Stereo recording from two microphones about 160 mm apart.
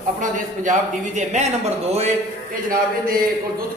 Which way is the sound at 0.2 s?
50° right (ahead or behind).